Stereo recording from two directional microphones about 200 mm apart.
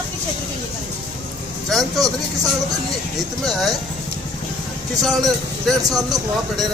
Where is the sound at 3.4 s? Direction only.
Centre (ahead or behind).